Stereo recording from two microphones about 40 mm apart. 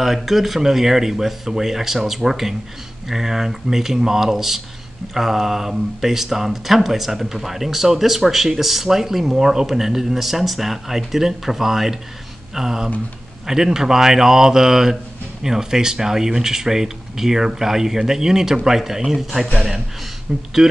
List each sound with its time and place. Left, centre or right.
0.0 s a man's voice: centre
20.3 s speech: centre